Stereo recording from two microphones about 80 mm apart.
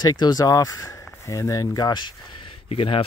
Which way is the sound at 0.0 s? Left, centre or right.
Left.